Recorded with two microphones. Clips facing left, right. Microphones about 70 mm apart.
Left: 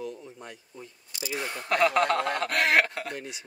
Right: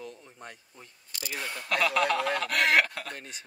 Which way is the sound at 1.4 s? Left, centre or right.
Left.